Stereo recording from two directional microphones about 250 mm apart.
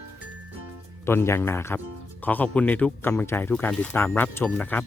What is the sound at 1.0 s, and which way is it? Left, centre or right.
Speech, centre.